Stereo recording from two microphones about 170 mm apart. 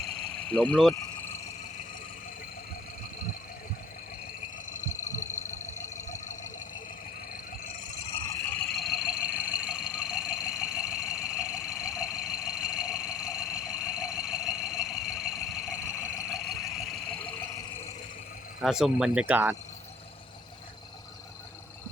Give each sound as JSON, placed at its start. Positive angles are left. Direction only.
{"t": 0.0, "sound": "vehicle", "side_deg": 0}
{"t": 5.2, "sound": "a sound", "side_deg": 45}
{"t": 5.8, "sound": "engine", "side_deg": 45}
{"t": 7.9, "sound": "vehicle", "side_deg": 35}
{"t": 8.4, "sound": "vehicle", "side_deg": 5}
{"t": 18.6, "sound": "speech", "side_deg": -5}